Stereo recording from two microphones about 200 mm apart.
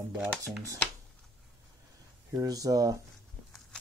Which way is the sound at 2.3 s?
20° right (ahead or behind).